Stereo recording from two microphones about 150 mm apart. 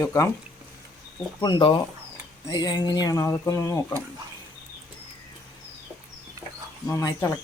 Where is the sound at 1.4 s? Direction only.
30° left (ahead or behind).